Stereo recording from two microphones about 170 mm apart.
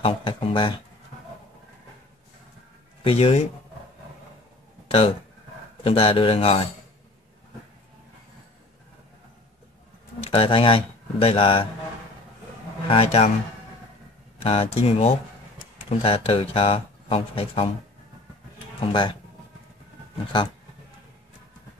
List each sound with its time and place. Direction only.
0.0 s speech: 30° left (ahead or behind)
3.0 s speech: 35° left (ahead or behind)
4.8 s a sound: 35° left (ahead or behind)
5.9 s speech: 35° left (ahead or behind)
10.3 s speech: 30° left (ahead or behind)
12.8 s speech: 35° left (ahead or behind)
14.4 s speech: 35° left (ahead or behind)
18.8 s speech: 30° left (ahead or behind)